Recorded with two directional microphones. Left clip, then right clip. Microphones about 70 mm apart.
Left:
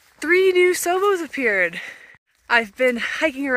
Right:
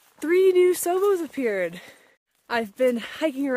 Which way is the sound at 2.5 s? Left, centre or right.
Right.